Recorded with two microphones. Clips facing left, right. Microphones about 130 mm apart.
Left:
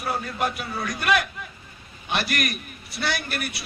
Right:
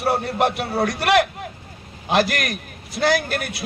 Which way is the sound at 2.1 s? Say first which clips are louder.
Right 7 dB; 90° right.